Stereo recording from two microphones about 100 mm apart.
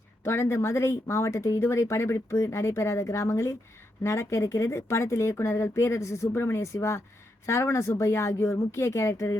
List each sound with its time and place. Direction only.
0.3 s speech: 25° left (ahead or behind)